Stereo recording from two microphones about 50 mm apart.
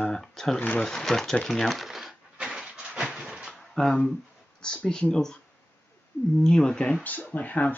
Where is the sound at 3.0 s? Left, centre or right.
Right.